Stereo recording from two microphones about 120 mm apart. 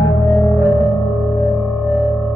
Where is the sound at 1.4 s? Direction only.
5° left (ahead or behind).